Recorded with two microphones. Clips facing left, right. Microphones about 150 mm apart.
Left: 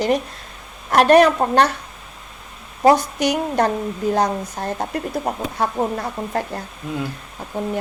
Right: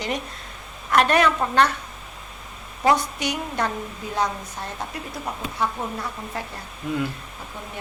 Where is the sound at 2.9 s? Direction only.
40° left (ahead or behind).